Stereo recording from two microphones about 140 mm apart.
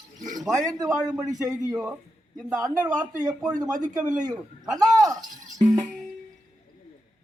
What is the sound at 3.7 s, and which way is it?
Speech, 65° right (ahead or behind).